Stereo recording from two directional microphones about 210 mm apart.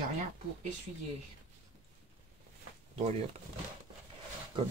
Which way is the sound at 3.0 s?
30° right (ahead or behind).